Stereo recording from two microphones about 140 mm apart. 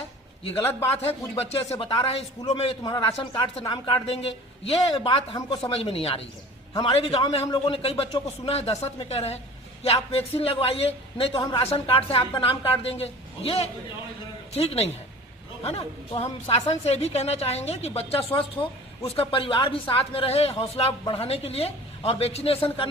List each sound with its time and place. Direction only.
0.6 s a man's voice: 15° left (ahead or behind)
1.7 s a woman's voice: 40° left (ahead or behind)
2.6 s a woman's voice: 45° left (ahead or behind)